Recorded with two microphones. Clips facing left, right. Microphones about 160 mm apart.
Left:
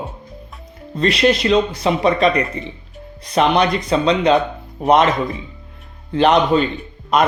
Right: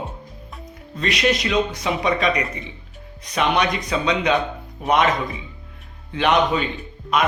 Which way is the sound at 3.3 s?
30° left (ahead or behind).